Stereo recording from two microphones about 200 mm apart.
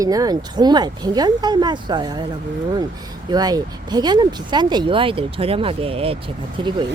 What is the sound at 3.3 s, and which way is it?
Speech, 20° right (ahead or behind).